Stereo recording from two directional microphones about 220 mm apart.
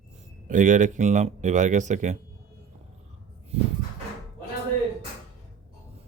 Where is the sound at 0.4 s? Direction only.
35° right (ahead or behind).